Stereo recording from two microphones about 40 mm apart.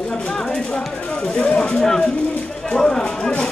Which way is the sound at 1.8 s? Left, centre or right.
Centre.